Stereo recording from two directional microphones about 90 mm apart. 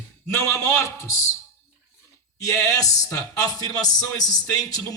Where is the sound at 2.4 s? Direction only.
35° left (ahead or behind).